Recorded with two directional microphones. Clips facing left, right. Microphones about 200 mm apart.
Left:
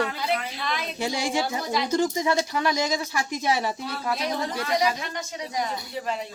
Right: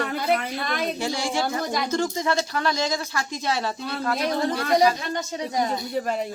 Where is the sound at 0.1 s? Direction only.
50° right (ahead or behind).